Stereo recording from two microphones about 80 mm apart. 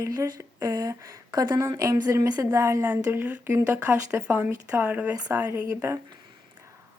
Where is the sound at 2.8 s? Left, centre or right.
Right.